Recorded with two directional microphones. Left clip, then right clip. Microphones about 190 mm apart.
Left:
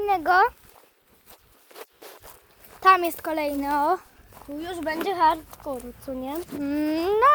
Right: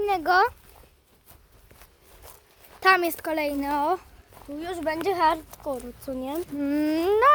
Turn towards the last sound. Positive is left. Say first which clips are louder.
# even
turn(degrees=-5)  # may be behind; listen again after turning